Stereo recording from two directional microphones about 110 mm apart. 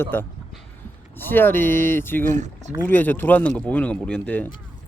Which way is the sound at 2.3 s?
90° right.